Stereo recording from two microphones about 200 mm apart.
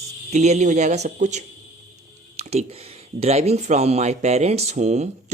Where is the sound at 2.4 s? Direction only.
35° right (ahead or behind).